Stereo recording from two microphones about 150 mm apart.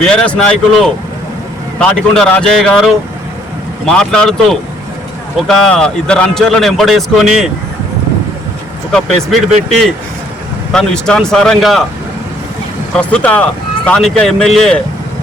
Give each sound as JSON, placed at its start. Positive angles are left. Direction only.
{"t": 0.0, "sound": "speech", "side_deg": 5}
{"t": 8.9, "sound": "speech", "side_deg": 0}
{"t": 10.7, "sound": "speech", "side_deg": 5}
{"t": 12.9, "sound": "speech", "side_deg": 5}